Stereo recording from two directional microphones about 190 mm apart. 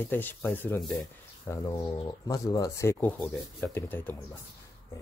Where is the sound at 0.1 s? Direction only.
10° left (ahead or behind).